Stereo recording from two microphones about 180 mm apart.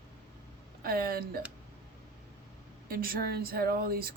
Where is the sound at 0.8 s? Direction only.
55° right (ahead or behind).